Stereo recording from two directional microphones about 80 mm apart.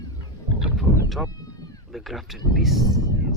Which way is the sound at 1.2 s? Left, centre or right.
Left.